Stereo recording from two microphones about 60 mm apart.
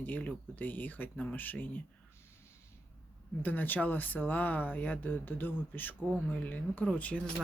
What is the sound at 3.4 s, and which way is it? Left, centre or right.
Speech, left.